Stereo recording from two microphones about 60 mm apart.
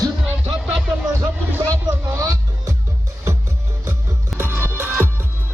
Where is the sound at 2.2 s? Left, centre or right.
Right.